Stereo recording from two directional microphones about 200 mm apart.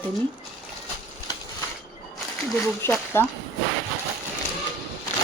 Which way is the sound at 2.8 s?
10° left (ahead or behind).